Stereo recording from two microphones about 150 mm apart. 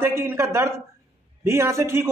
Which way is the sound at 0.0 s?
15° right (ahead or behind).